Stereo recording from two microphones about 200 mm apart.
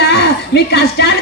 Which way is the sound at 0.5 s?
60° left (ahead or behind).